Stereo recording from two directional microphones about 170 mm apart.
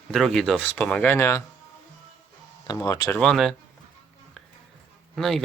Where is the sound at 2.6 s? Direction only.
20° left (ahead or behind).